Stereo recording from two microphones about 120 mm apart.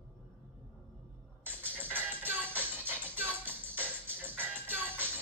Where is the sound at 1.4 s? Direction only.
15° right (ahead or behind).